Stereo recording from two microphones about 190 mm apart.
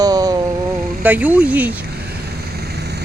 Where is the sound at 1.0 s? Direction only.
10° right (ahead or behind).